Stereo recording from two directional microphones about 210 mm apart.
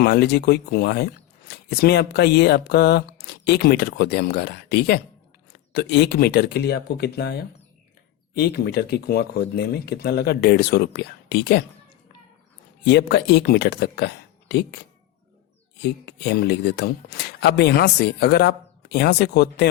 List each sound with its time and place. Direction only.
0.0 s speech: 50° left (ahead or behind)
12.8 s speech: 55° left (ahead or behind)
15.8 s speech: 50° left (ahead or behind)